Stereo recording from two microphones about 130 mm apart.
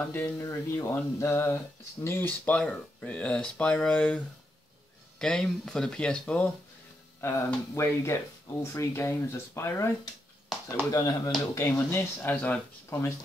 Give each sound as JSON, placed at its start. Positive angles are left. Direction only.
{"t": 0.0, "sound": "speech", "side_deg": 20}
{"t": 5.2, "sound": "speech", "side_deg": 5}
{"t": 7.2, "sound": "speech", "side_deg": 20}
{"t": 10.9, "sound": "speech", "side_deg": 30}